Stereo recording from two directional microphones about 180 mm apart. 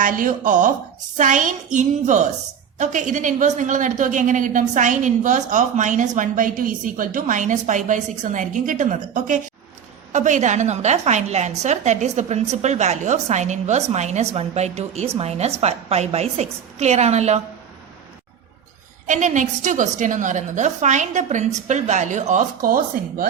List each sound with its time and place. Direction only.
0.0 s a woman's voice: 45° right (ahead or behind)
19.0 s a woman's voice: 45° right (ahead or behind)